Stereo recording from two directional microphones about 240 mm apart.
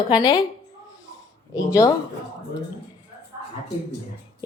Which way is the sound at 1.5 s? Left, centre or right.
Centre.